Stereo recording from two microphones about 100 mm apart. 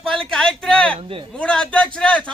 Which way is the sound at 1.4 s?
10° left (ahead or behind).